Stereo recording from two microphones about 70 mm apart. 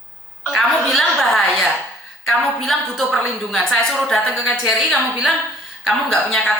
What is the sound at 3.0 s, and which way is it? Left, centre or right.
A woman's voice, centre.